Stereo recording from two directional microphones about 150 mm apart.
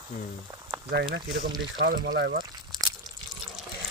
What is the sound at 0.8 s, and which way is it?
Speech, 90° right.